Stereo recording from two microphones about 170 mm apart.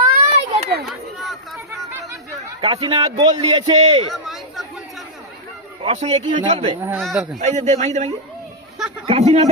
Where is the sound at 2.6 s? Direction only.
35° right (ahead or behind).